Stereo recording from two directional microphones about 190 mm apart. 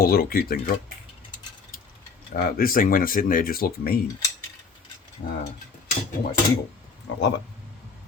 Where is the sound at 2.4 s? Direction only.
50° left (ahead or behind).